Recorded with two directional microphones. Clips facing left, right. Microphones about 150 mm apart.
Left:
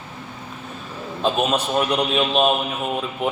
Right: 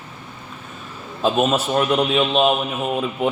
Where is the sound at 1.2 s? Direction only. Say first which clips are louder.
Right 2 dB; 5° right (ahead or behind).